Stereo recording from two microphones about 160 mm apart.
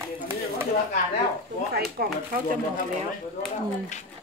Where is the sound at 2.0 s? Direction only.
70° right (ahead or behind).